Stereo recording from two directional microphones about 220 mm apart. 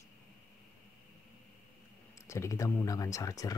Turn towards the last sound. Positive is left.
turn(degrees=15)  # may be behind; listen again after turning